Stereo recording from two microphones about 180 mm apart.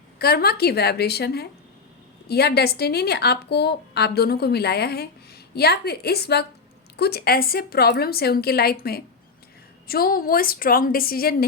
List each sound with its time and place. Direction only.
0.2 s a woman's voice: 60° left (ahead or behind)